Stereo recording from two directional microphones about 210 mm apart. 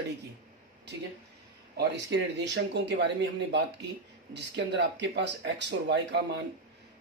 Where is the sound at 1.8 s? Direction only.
55° right (ahead or behind).